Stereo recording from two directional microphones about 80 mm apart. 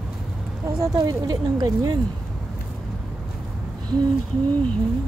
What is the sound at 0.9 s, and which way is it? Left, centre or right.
Speech, right.